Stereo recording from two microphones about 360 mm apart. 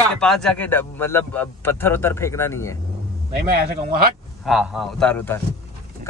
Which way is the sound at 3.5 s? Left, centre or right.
Right.